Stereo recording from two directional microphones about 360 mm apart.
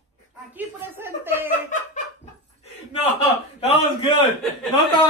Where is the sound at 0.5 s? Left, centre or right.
Centre.